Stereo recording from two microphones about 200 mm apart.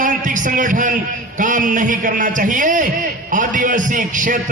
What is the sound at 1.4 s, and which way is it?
A man's voice, 40° right (ahead or behind).